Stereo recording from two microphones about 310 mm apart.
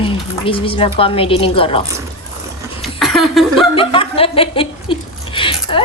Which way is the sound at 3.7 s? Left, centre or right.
Centre.